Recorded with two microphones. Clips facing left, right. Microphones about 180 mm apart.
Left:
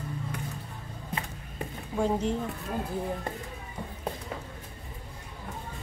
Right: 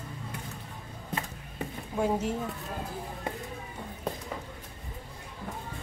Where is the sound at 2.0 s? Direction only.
5° right (ahead or behind).